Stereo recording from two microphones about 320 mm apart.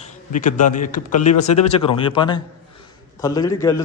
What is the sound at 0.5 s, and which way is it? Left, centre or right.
A man's voice, left.